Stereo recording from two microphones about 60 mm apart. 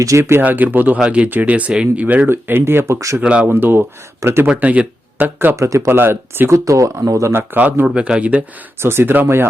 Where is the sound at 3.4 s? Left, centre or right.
Right.